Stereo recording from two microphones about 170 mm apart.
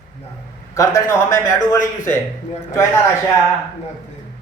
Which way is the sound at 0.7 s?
20° left (ahead or behind).